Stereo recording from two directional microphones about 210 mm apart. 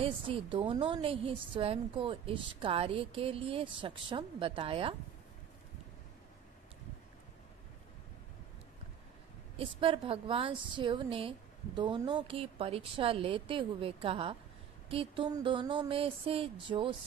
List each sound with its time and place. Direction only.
0.0 s a woman's voice: 25° right (ahead or behind)
9.6 s a woman's voice: 25° right (ahead or behind)